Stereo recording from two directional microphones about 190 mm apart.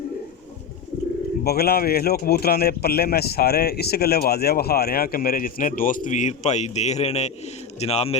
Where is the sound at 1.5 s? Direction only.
55° left (ahead or behind).